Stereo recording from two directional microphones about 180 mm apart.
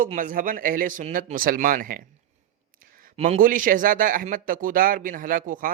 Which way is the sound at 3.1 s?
35° right (ahead or behind).